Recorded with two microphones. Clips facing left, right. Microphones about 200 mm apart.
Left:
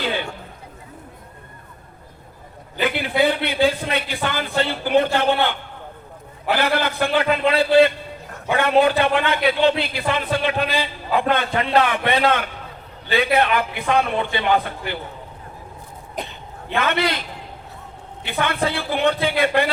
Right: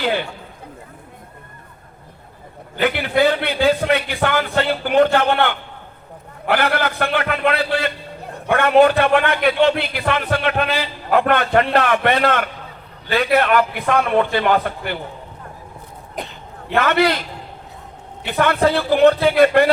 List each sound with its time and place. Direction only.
2.8 s a man's voice: 60° right (ahead or behind)
16.7 s a man's voice: 55° right (ahead or behind)
18.3 s a man's voice: 55° right (ahead or behind)